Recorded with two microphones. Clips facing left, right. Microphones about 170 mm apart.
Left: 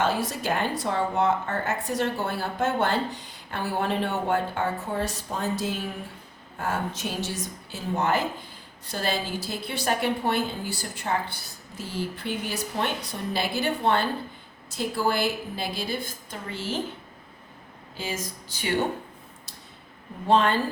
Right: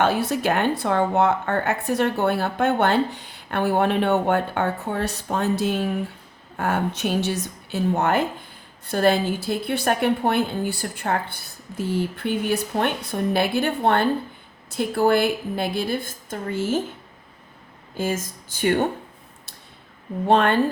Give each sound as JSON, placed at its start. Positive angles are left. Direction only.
{"t": 0.0, "sound": "speech", "side_deg": -65}
{"t": 17.9, "sound": "speech", "side_deg": -50}
{"t": 20.2, "sound": "speech", "side_deg": -60}